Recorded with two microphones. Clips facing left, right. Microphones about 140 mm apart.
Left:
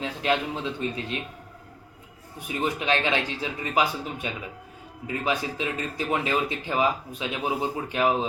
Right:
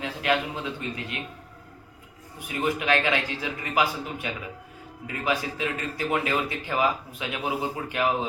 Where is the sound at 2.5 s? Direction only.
25° left (ahead or behind).